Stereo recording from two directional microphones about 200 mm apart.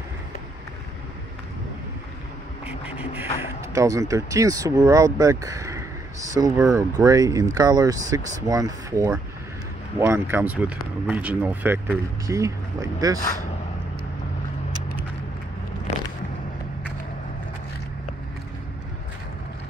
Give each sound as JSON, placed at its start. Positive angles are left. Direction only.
{"t": 3.3, "sound": "speech", "side_deg": -15}